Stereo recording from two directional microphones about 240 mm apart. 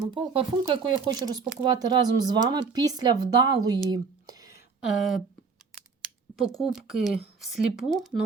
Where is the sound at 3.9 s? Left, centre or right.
Centre.